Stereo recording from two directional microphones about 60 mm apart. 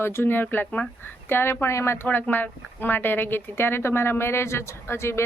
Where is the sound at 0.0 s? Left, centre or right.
Left.